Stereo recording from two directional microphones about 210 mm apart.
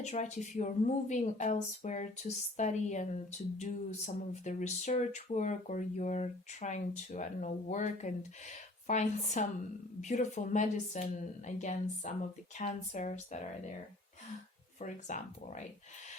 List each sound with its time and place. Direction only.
0.0 s speech: 35° left (ahead or behind)
14.8 s speech: 35° left (ahead or behind)